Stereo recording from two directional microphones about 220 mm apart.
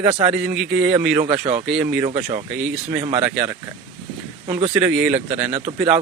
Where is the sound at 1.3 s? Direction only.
25° right (ahead or behind).